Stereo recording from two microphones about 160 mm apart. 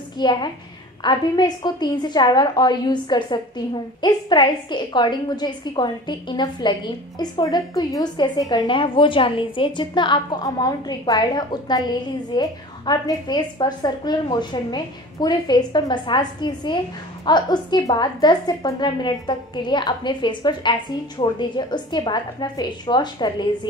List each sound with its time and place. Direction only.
0.2 s a woman's voice: 30° left (ahead or behind)